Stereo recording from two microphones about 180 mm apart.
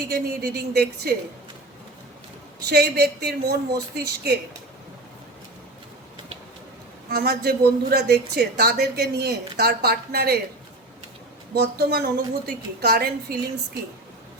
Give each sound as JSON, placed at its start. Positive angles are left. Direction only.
{"t": 0.1, "sound": "a woman's voice", "side_deg": -65}
{"t": 2.6, "sound": "a woman's voice", "side_deg": -60}
{"t": 7.1, "sound": "a woman's voice", "side_deg": -60}
{"t": 11.5, "sound": "a woman's voice", "side_deg": -60}